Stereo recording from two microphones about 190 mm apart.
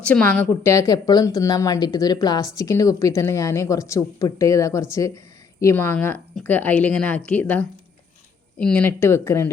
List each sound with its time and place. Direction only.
0.0 s a woman's voice: 5° left (ahead or behind)